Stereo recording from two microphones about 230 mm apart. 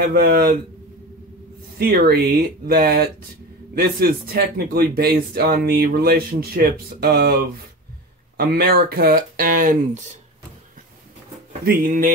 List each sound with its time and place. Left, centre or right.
0.0 s a man's voice: right
1.8 s a man's voice: right
11.6 s a man's voice: right